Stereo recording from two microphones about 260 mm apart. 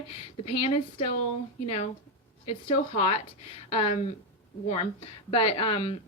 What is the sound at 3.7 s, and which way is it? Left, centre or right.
Speech, left.